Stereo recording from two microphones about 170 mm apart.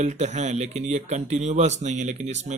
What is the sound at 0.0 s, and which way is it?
Speech, 40° right (ahead or behind).